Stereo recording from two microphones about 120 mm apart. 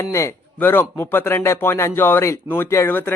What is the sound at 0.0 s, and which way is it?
A man's voice, 25° left (ahead or behind).